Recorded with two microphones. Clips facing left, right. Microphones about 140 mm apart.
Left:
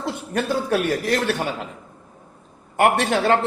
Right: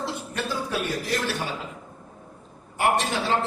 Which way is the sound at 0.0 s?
55° left (ahead or behind).